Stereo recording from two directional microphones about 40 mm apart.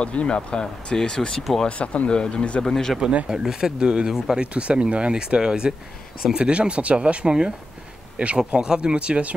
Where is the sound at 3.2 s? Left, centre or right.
Centre.